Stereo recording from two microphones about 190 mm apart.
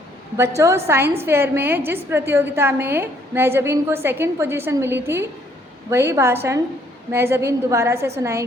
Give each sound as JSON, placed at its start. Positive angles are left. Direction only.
{"t": 0.3, "sound": "a woman's voice", "side_deg": -15}